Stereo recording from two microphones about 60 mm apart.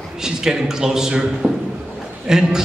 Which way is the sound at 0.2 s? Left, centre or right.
Centre.